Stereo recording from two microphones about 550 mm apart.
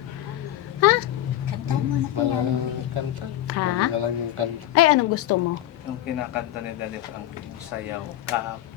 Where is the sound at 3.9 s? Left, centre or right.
Right.